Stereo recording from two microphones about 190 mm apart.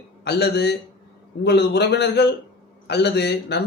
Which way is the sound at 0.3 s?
60° left (ahead or behind).